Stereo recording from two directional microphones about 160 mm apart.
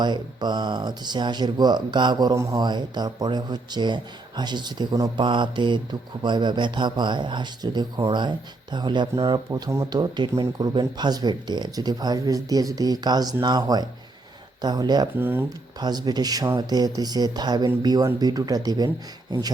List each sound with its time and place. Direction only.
0.0 s speech: 25° right (ahead or behind)
15.2 s speech: 15° right (ahead or behind)
15.8 s speech: 25° right (ahead or behind)